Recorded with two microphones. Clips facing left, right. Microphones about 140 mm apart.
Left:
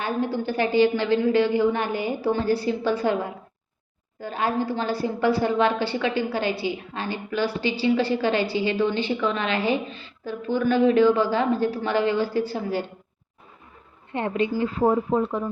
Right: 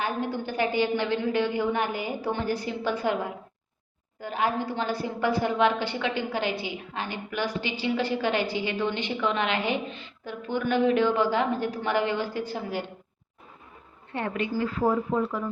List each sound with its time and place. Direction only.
0.4 s a woman's voice: 15° right (ahead or behind)
14.1 s a woman's voice: 20° left (ahead or behind)